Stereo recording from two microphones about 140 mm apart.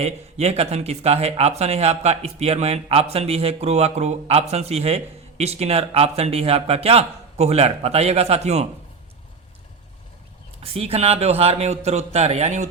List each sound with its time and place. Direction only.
0.0 s speech: 50° right (ahead or behind)
10.6 s speech: 45° right (ahead or behind)